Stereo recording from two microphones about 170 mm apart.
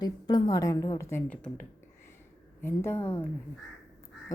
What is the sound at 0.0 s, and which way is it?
A woman's voice, 25° left (ahead or behind).